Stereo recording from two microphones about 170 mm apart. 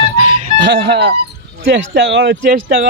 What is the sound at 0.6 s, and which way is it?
Speech, 85° right.